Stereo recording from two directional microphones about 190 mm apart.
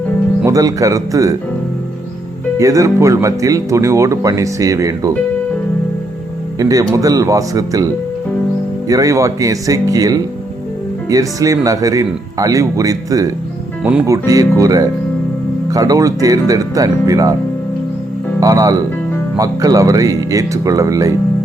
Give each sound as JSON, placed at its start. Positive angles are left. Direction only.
{"t": 0.4, "sound": "speech", "side_deg": -15}
{"t": 2.6, "sound": "speech", "side_deg": -15}
{"t": 6.6, "sound": "speech", "side_deg": -20}
{"t": 8.9, "sound": "speech", "side_deg": -15}
{"t": 18.3, "sound": "speech", "side_deg": -20}